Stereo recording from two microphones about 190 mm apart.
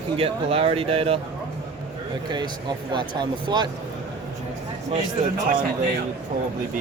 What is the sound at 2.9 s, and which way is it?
Speech, 25° right (ahead or behind).